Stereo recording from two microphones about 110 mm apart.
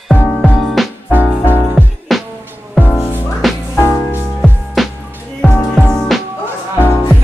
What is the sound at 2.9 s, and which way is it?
Music, 20° left (ahead or behind).